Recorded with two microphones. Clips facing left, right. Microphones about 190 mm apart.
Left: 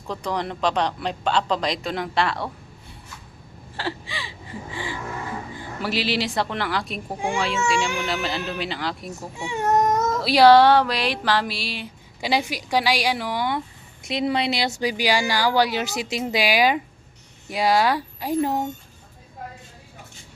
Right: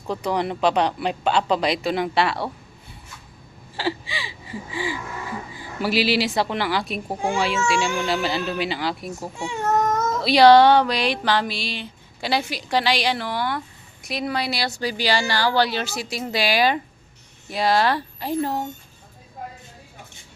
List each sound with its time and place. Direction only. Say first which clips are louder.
0.1 s speech: right 3 dB; 10° right (ahead or behind)
3.8 s gasp: right 4 dB; centre (ahead or behind)
5.5 s speech: right 5 dB; 10° right (ahead or behind)
9.4 s speech: left 1 dB; 15° left (ahead or behind)
10.1 s speech: right 1 dB; 5° left (ahead or behind)